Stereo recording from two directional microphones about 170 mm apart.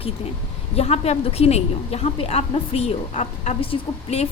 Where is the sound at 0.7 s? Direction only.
35° left (ahead or behind).